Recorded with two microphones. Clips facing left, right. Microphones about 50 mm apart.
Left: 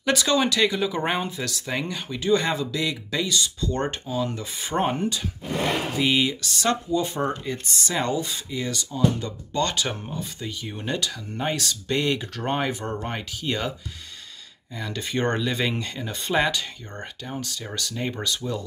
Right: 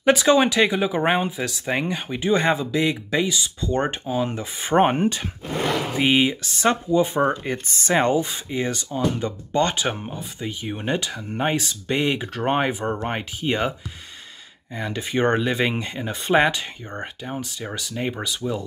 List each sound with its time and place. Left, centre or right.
0.0 s speech: right
7.4 s speech: right
15.0 s speech: centre